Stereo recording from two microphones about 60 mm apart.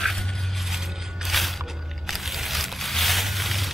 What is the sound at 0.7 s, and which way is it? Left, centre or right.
Music, centre.